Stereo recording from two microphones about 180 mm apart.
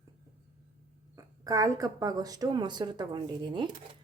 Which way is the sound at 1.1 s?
20° right (ahead or behind).